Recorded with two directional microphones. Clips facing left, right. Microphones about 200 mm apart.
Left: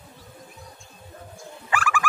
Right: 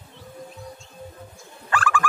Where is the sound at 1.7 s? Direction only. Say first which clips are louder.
Right 2 dB; 10° left (ahead or behind).